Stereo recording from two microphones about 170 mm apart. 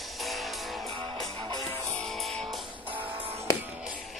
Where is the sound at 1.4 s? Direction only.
25° right (ahead or behind).